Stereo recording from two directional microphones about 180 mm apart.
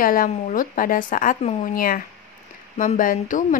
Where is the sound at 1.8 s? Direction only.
50° left (ahead or behind).